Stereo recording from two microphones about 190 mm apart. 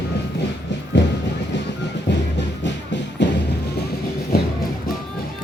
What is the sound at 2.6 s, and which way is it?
Music, 65° left (ahead or behind).